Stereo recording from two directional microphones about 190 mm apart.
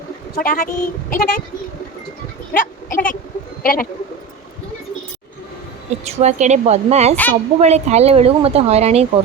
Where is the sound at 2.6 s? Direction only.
45° left (ahead or behind).